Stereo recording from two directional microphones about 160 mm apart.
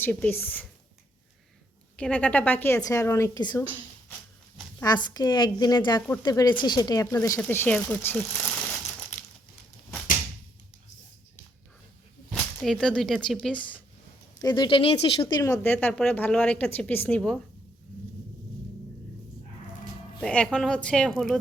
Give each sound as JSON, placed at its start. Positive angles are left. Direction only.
{"t": 0.0, "sound": "a woman's voice", "side_deg": 10}
{"t": 2.0, "sound": "a woman's voice", "side_deg": 10}
{"t": 4.8, "sound": "speech", "side_deg": 25}
{"t": 12.3, "sound": "whip", "side_deg": 0}
{"t": 13.2, "sound": "a woman's voice", "side_deg": 5}
{"t": 14.3, "sound": "speech", "side_deg": 25}
{"t": 15.4, "sound": "a woman's voice", "side_deg": 20}
{"t": 20.2, "sound": "speech", "side_deg": 5}